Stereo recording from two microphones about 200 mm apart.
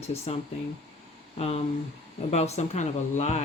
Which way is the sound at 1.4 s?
30° left (ahead or behind).